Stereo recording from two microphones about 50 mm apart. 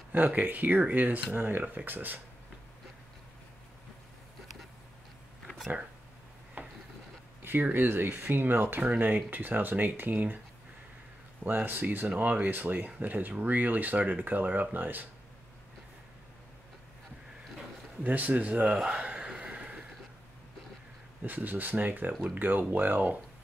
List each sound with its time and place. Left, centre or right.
0.4 s speech: right
1.3 s speech: right
6.6 s a sound: right
7.4 s speech: right
11.4 s speech: right
18.0 s speech: right
19.4 s a sound: right
21.2 s speech: right